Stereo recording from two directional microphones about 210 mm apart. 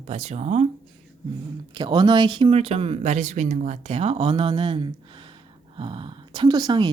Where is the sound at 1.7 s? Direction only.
20° right (ahead or behind).